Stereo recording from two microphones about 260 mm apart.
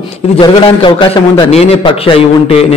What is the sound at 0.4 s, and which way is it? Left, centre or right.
A man's voice, centre.